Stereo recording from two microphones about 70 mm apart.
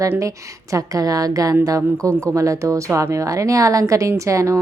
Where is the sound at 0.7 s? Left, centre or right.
Right.